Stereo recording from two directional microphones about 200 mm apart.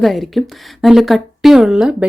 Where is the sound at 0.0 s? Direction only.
Centre (ahead or behind).